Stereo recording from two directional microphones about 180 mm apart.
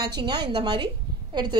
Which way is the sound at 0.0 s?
25° right (ahead or behind).